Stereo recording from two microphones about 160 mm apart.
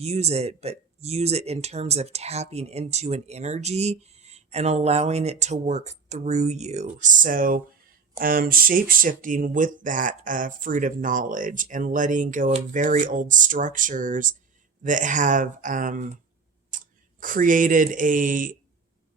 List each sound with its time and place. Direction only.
0.0 s speech: 40° right (ahead or behind)